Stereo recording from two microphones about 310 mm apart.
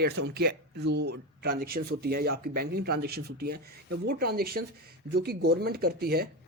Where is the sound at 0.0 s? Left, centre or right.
Right.